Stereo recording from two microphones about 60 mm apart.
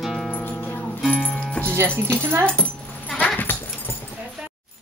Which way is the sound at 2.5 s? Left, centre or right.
Centre.